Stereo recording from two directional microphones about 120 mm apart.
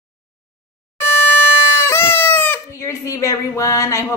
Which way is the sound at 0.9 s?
20° left (ahead or behind).